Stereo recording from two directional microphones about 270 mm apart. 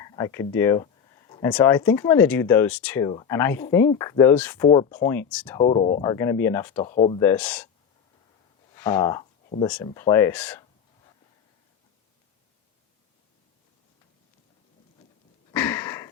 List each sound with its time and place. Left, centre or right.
0.0 s a sound: centre
1.5 s speech: centre
5.5 s speech: centre
6.7 s speech: left
7.3 s speech: centre
8.7 s speech: centre
15.5 s sniff: centre